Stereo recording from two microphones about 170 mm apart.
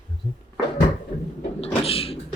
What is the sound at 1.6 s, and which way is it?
Cupboard open or close, 35° left (ahead or behind).